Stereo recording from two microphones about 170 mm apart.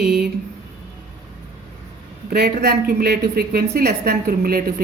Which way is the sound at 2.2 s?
65° right (ahead or behind).